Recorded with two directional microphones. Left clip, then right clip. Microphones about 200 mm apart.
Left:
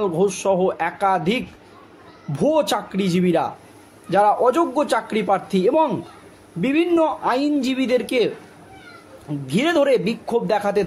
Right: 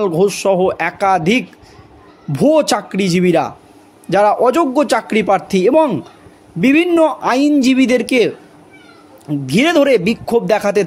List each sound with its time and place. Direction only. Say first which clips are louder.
0.0 s a man's voice: right 6 dB; 40° right (ahead or behind)
9.5 s a man's voice: right 6 dB; 40° right (ahead or behind)